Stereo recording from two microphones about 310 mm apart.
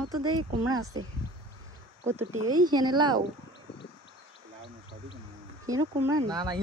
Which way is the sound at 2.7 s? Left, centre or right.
Centre.